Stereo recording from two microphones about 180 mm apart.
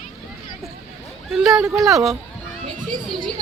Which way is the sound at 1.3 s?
5° right (ahead or behind).